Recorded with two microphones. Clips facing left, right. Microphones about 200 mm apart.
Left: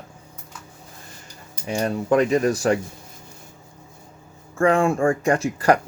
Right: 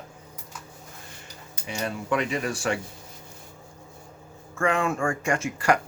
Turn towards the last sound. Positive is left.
turn(degrees=35)  # may be behind; listen again after turning